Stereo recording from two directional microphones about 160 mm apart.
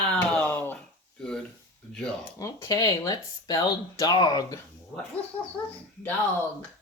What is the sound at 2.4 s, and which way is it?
Speech, 20° left (ahead or behind).